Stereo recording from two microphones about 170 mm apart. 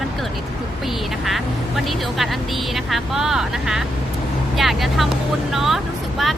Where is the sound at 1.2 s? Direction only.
Centre (ahead or behind).